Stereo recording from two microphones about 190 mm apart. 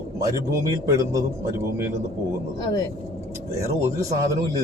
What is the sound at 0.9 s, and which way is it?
Speech, 15° right (ahead or behind).